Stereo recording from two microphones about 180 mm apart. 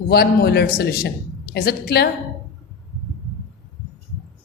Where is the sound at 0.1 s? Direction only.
60° left (ahead or behind).